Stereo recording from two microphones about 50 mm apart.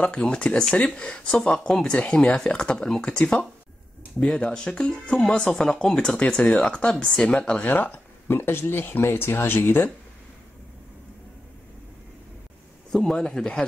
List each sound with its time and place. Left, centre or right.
0.0 s speech: centre
7.6 s speech: left
8.3 s speech: left
12.9 s speech: centre